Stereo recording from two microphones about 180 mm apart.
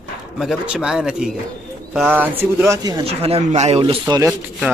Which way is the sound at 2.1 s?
15° right (ahead or behind).